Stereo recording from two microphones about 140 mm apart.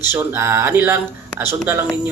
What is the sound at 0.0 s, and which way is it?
Speech, 15° right (ahead or behind).